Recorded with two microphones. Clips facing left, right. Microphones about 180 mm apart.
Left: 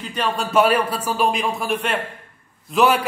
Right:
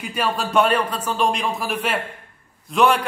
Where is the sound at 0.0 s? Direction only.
10° right (ahead or behind).